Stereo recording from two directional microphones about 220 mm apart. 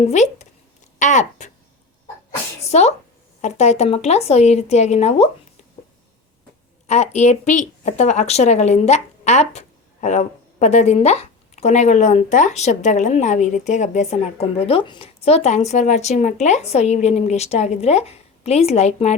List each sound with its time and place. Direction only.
0.0 s speech: 30° left (ahead or behind)
2.6 s a sound: 30° left (ahead or behind)
3.4 s a woman's voice: 30° left (ahead or behind)
6.8 s speech: 30° left (ahead or behind)